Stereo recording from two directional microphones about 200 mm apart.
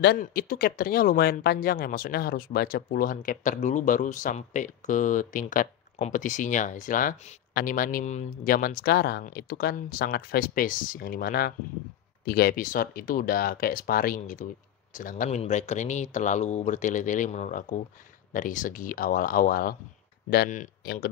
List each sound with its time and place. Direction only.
0.2 s speech: 45° left (ahead or behind)